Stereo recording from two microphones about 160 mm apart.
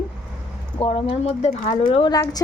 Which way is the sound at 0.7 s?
35° left (ahead or behind).